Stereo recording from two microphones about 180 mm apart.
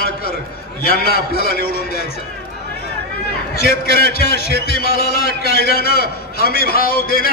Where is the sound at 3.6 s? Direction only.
60° left (ahead or behind).